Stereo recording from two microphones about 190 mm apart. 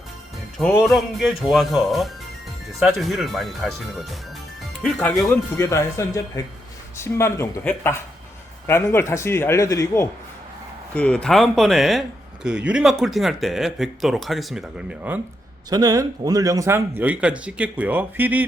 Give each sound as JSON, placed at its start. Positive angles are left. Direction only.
{"t": 0.8, "sound": "speech", "side_deg": 0}
{"t": 5.5, "sound": "a man's voice", "side_deg": 15}
{"t": 15.7, "sound": "speech", "side_deg": -20}